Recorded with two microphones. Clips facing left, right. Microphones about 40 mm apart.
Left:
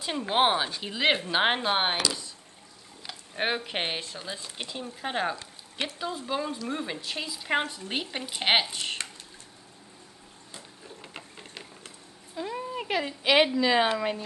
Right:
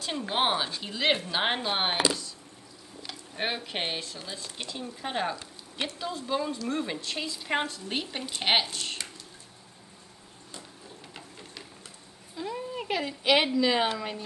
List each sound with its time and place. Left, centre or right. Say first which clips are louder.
0.0 s speech: left 3 dB; centre
3.0 s speech: left 2 dB; centre
8.6 s speech: left 2 dB; left
10.5 s a sound: even; left
12.4 s a sound: left 1 dB; centre
12.9 s speech: left 2 dB; centre